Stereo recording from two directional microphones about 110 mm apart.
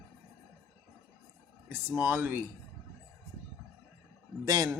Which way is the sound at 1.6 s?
20° right (ahead or behind).